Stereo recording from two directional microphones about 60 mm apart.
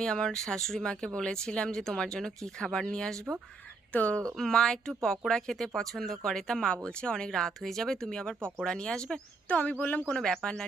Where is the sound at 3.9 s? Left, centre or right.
Left.